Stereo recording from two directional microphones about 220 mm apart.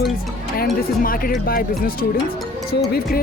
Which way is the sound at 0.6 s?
40° left (ahead or behind).